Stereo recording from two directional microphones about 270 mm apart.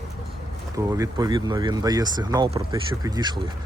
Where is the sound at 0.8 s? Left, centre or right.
Centre.